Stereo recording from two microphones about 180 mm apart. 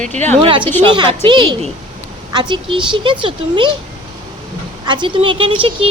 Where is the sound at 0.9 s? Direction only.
25° right (ahead or behind).